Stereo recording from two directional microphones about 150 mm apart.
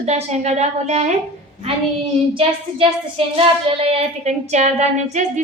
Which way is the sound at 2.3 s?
35° right (ahead or behind).